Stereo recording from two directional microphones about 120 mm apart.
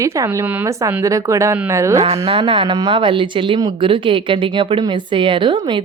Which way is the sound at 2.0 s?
50° right (ahead or behind).